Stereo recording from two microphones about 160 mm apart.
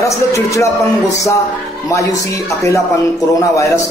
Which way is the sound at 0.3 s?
20° left (ahead or behind).